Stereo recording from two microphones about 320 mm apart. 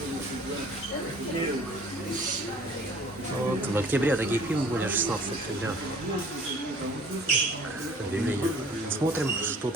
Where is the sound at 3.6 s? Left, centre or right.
Centre.